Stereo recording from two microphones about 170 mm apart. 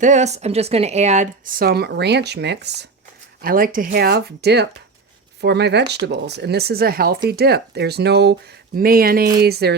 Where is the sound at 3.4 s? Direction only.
55° right (ahead or behind).